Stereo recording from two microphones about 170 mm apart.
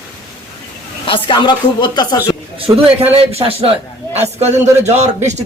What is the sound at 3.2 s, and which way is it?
A man's voice, 35° right (ahead or behind).